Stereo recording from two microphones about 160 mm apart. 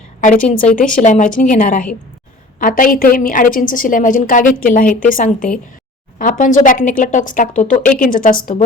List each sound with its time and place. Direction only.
0.2 s a woman's voice: 55° left (ahead or behind)